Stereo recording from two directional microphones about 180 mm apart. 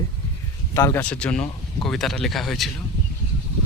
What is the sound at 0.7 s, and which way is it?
Speech, 15° left (ahead or behind).